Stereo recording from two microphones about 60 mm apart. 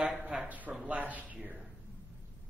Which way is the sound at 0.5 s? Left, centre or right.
Right.